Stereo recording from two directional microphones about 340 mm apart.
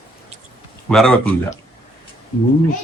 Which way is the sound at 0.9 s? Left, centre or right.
Centre.